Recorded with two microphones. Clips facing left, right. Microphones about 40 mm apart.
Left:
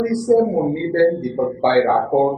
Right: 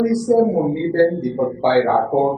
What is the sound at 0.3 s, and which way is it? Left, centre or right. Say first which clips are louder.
A man's voice: left 1 dB; centre.